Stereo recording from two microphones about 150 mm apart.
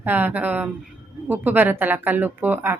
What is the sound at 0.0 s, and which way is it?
Speech, 10° right (ahead or behind).